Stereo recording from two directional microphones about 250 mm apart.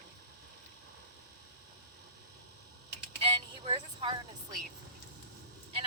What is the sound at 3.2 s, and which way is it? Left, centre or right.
Speech, right.